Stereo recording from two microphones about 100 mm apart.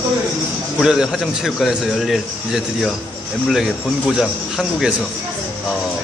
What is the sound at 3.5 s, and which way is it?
Speech, 5° right (ahead or behind).